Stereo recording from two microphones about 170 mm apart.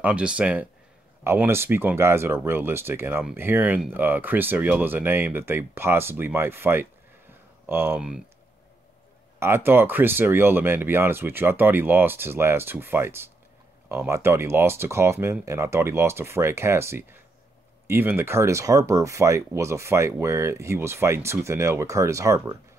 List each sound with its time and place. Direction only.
0.0 s speech: 5° right (ahead or behind)
9.4 s speech: 15° right (ahead or behind)